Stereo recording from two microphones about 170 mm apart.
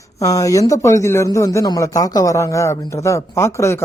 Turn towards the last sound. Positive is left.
turn(degrees=15)  # may be behind; listen again after turning